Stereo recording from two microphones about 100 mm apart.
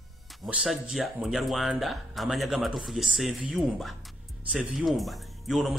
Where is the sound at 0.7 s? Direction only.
Centre (ahead or behind).